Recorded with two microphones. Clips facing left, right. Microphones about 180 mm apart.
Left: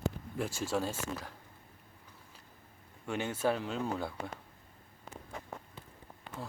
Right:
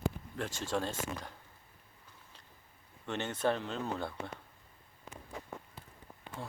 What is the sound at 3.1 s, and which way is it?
Speech, 10° left (ahead or behind).